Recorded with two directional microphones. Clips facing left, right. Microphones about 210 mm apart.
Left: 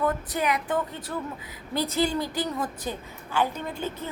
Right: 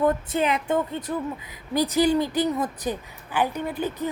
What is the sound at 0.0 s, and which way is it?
A woman's voice, 25° right (ahead or behind).